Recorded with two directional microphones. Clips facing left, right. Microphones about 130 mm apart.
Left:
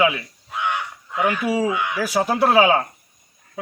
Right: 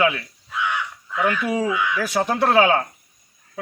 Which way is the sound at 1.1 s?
20° left (ahead or behind).